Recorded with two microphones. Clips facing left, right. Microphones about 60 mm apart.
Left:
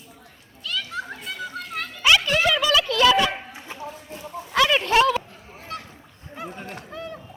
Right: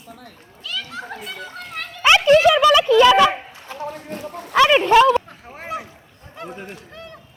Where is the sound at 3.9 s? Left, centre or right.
Right.